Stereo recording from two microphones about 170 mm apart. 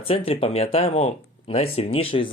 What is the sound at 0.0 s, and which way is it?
Speech, 35° left (ahead or behind).